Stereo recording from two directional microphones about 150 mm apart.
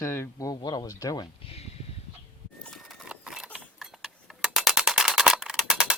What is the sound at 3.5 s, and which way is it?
Tick-tock, 5° right (ahead or behind).